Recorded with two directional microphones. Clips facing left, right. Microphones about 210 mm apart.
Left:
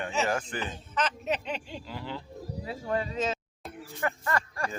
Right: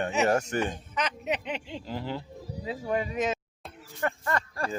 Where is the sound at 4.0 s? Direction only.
30° right (ahead or behind).